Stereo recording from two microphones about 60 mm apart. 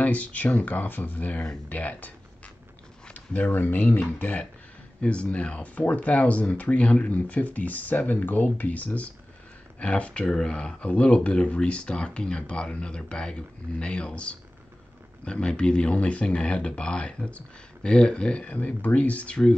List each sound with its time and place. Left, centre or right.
0.0 s speech: left